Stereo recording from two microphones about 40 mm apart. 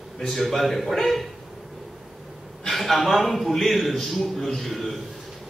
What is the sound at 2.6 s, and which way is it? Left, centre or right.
A man's voice, centre.